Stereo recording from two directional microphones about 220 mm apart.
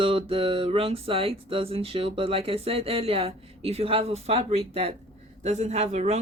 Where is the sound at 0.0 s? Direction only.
25° right (ahead or behind).